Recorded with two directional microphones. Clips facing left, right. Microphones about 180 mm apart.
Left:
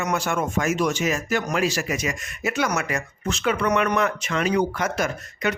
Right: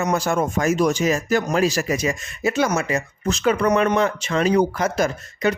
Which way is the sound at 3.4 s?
40° right (ahead or behind).